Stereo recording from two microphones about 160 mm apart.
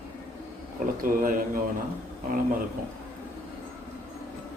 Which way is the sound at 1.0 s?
60° right (ahead or behind).